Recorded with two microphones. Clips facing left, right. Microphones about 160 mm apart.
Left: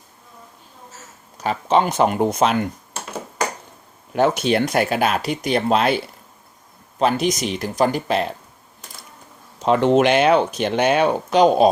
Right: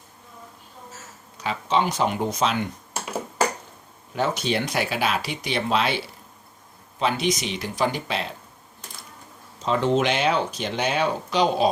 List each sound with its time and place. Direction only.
1.4 s speech: 45° left (ahead or behind)
4.1 s speech: 60° left (ahead or behind)
7.0 s speech: 45° left (ahead or behind)
9.6 s speech: 60° left (ahead or behind)